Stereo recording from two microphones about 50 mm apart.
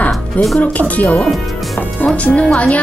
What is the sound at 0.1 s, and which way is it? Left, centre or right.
Music, centre.